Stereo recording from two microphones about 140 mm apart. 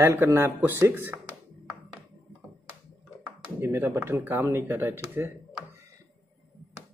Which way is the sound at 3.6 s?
15° right (ahead or behind).